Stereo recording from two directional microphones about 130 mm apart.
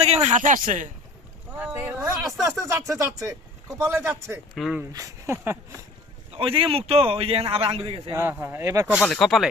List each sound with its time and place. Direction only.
0.0 s speech: 60° right (ahead or behind); by 0.9 s 80° right
1.5 s boat: 10° right (ahead or behind)
2.5 s speech: 20° right (ahead or behind)
4.5 s speech: centre (ahead or behind)
4.9 s speech: 25° right (ahead or behind)
6.3 s speech: 45° right (ahead or behind)
8.1 s speech: 20° right (ahead or behind)
9.0 s speech: centre (ahead or behind)